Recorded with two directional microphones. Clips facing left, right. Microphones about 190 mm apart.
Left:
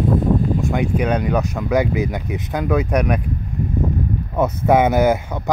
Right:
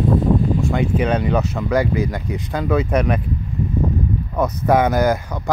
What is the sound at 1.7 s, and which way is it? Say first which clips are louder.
Speech: left 1 dB; 20° left (ahead or behind).